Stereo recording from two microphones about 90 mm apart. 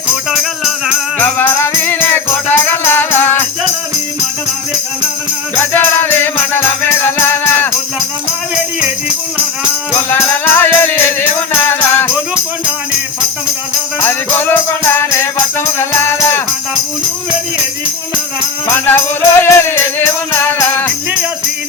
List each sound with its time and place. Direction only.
1.2 s music: 20° left (ahead or behind)
5.7 s music: 25° left (ahead or behind)
10.1 s music: 25° left (ahead or behind)
14.0 s music: 20° left (ahead or behind)
18.7 s music: 20° left (ahead or behind)